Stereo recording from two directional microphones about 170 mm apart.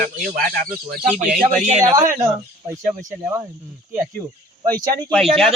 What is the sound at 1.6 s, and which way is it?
Speech, 40° right (ahead or behind).